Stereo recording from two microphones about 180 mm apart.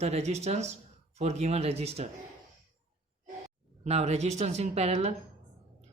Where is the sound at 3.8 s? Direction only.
35° right (ahead or behind).